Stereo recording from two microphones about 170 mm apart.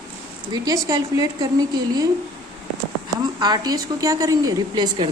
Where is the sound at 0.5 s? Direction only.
20° right (ahead or behind).